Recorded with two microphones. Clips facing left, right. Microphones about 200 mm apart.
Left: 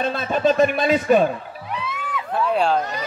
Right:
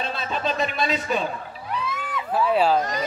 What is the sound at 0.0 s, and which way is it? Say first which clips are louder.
Speech: left 7 dB; 50° left (ahead or behind).